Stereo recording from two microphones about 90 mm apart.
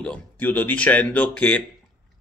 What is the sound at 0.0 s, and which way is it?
A man's voice, 15° left (ahead or behind).